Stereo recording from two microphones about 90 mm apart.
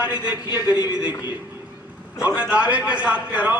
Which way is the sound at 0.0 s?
15° right (ahead or behind).